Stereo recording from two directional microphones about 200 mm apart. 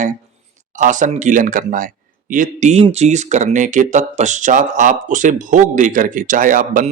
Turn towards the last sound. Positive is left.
turn(degrees=-40)  # may be behind; listen again after turning